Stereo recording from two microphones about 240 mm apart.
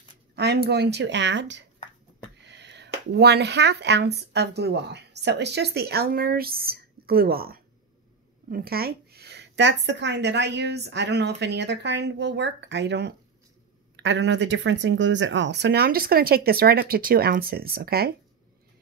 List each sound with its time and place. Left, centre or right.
0.4 s a woman's voice: right